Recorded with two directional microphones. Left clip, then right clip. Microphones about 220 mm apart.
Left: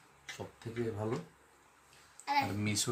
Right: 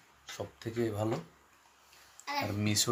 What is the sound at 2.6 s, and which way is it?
Speech, 30° right (ahead or behind).